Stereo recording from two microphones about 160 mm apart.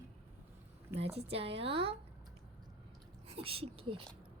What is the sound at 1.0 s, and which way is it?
Speech, 40° right (ahead or behind).